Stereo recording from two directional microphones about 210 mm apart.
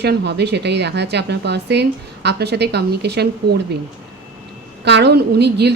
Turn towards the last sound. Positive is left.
turn(degrees=-50)  # may be behind; listen again after turning